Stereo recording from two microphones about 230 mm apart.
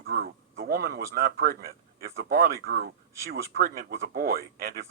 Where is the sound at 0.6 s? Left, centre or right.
Right.